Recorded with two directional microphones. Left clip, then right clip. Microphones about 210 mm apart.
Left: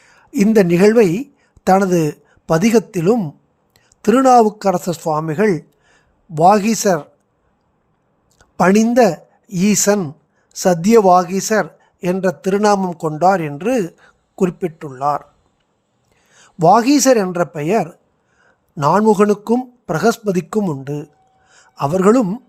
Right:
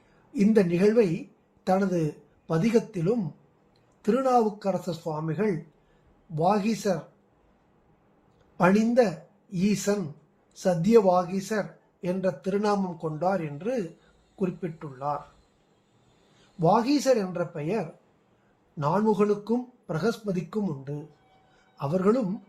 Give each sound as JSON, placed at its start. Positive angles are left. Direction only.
{"t": 0.3, "sound": "a woman's voice", "side_deg": 45}
{"t": 8.4, "sound": "speech", "side_deg": 50}
{"t": 16.6, "sound": "speech", "side_deg": 50}